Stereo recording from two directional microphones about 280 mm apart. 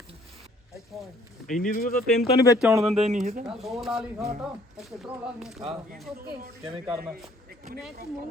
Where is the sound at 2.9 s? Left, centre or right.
Right.